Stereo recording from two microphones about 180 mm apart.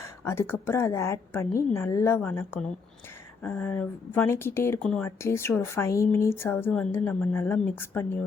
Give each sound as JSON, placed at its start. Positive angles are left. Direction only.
{"t": 0.0, "sound": "speech", "side_deg": 15}